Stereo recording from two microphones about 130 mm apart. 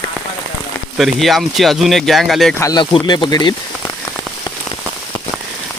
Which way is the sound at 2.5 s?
25° left (ahead or behind).